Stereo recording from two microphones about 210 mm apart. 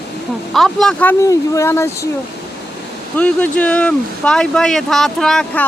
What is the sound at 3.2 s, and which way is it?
Speech, 5° left (ahead or behind).